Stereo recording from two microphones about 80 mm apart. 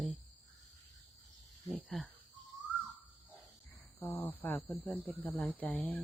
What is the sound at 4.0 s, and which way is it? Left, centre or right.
Speech, left.